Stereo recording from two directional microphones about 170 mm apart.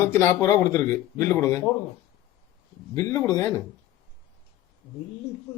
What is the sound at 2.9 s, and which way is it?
Speech, 20° left (ahead or behind).